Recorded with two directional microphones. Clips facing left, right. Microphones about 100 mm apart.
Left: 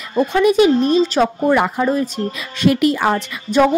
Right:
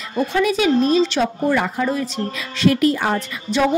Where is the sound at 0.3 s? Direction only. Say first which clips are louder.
Left 5 dB; 50° left (ahead or behind).